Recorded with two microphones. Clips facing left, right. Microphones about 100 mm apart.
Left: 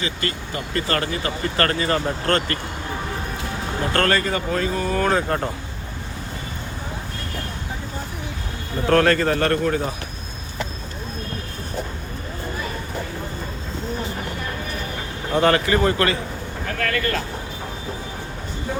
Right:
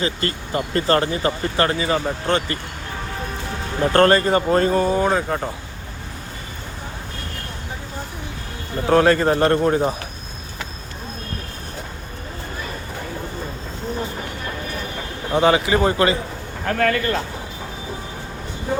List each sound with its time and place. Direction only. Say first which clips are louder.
0.0 s speech: right 3 dB; 35° right (ahead or behind)
1.6 s speech: right 1 dB; 10° right (ahead or behind)
3.8 s speech: right 6 dB; 30° right (ahead or behind)
4.9 s speech: right 2 dB; 15° right (ahead or behind)
5.1 s speech: even; centre (ahead or behind)
8.9 s a man's voice: right 2 dB; 15° right (ahead or behind)
15.3 s speech: right 1 dB; 5° right (ahead or behind)
16.6 s a man's voice: right 5 dB; 30° right (ahead or behind)